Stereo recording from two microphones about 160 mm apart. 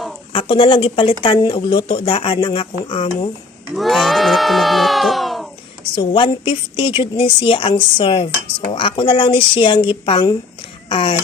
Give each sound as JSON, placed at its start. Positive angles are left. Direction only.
{"t": 0.3, "sound": "a woman's voice", "side_deg": 30}
{"t": 3.8, "sound": "speech", "side_deg": 0}
{"t": 5.9, "sound": "a woman's voice", "side_deg": 30}